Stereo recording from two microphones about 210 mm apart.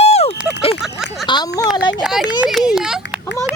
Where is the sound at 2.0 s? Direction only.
Centre (ahead or behind).